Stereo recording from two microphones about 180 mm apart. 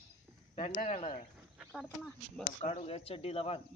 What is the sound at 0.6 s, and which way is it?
Speech, 35° left (ahead or behind).